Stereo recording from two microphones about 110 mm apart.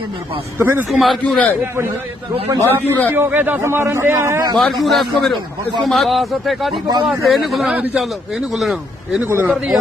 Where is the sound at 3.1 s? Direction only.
20° right (ahead or behind).